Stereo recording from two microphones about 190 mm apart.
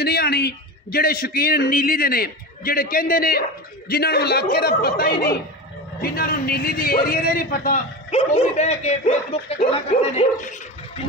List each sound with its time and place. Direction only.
0.0 s a man's voice: 55° left (ahead or behind)
8.1 s speech: 35° left (ahead or behind)